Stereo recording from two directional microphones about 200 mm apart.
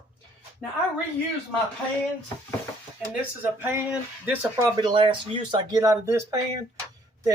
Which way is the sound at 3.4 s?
10° right (ahead or behind).